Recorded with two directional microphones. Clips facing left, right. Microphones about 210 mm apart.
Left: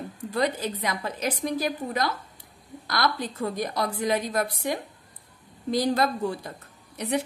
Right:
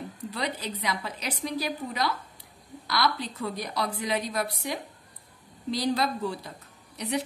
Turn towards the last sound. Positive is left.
turn(degrees=50)  # may be behind; listen again after turning